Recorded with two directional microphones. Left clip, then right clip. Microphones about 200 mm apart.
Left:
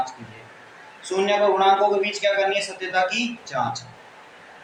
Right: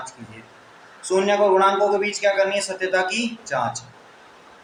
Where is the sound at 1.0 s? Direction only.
60° right (ahead or behind).